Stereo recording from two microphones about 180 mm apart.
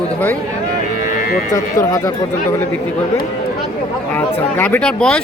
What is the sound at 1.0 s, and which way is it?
Music, 45° left (ahead or behind).